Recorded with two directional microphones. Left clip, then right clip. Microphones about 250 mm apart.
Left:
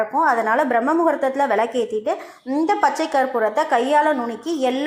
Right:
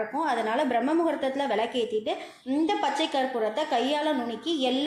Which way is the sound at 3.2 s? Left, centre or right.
Centre.